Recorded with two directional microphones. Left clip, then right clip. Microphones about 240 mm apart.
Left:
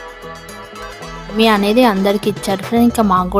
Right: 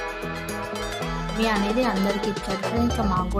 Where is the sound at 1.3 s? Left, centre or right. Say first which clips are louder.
Left 12 dB; left.